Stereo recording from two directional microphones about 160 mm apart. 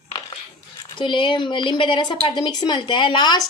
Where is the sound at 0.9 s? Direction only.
30° left (ahead or behind).